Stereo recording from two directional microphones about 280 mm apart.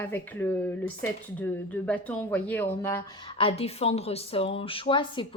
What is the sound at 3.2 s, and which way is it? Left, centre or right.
A woman's voice, centre.